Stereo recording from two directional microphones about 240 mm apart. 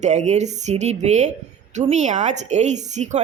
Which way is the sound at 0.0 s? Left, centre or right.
Right.